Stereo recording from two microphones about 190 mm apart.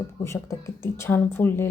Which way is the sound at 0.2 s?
15° left (ahead or behind).